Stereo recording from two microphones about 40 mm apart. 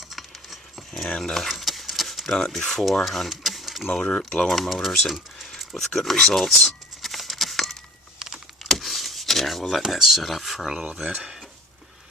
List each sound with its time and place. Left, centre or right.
0.1 s a sound: centre
3.0 s speech: centre
3.9 s speech: left
4.4 s speech: centre
6.1 s a sound: centre
8.8 s speech: centre